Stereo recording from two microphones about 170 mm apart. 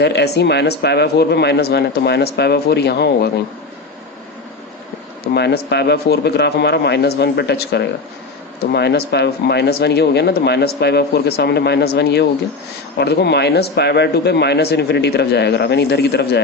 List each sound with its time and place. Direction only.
0.0 s speech: 90° left
5.2 s speech: 75° left (ahead or behind)